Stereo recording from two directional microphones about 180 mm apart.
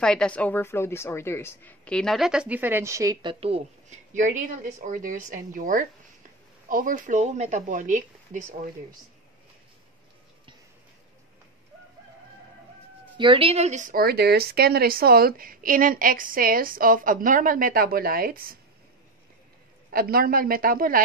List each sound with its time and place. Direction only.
0.0 s a woman's voice: 5° left (ahead or behind); by 8.5 s 45° right (ahead or behind)
13.2 s a woman's voice: 30° right (ahead or behind); by 18.6 s 55° right (ahead or behind)
19.9 s a woman's voice: 55° right (ahead or behind)